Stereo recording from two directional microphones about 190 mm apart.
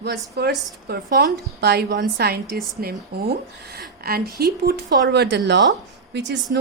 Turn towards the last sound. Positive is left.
turn(degrees=-70)  # may be behind; listen again after turning